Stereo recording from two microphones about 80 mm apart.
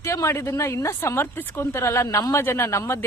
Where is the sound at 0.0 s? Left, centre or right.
Left.